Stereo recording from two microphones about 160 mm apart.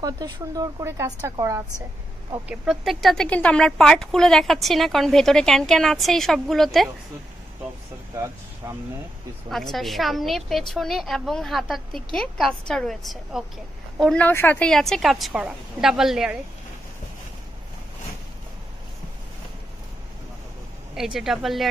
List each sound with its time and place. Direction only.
0.0 s speech: 25° right (ahead or behind)
2.4 s speech: 5° right (ahead or behind)
8.6 s speech: 20° right (ahead or behind)
9.5 s speech: centre (ahead or behind)
20.9 s speech: 5° right (ahead or behind)